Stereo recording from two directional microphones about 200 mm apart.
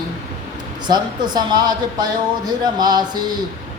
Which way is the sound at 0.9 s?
20° right (ahead or behind).